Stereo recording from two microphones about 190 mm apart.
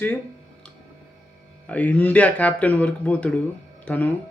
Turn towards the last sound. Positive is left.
turn(degrees=10)  # may be behind; listen again after turning